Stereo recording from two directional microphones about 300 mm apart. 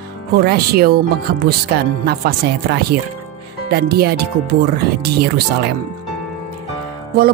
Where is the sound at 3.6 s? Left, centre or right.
Right.